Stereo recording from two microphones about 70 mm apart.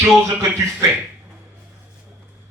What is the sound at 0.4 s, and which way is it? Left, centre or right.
Speech, right.